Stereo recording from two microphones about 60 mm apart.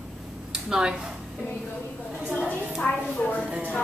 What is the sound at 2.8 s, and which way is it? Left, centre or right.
Speech, left.